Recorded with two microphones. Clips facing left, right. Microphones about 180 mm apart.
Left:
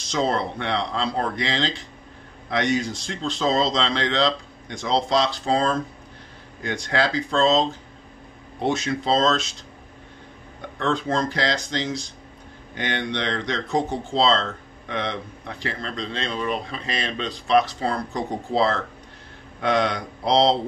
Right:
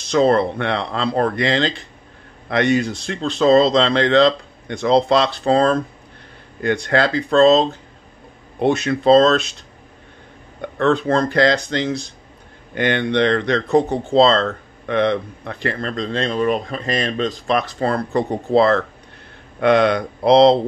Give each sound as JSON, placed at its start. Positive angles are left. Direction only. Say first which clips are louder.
{"t": 0.0, "sound": "speech", "louder": "right 8 dB", "side_deg": -60}
{"t": 10.8, "sound": "speech", "louder": "right 7 dB", "side_deg": -60}